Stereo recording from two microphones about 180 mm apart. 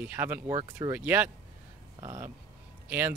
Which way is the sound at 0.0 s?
10° right (ahead or behind).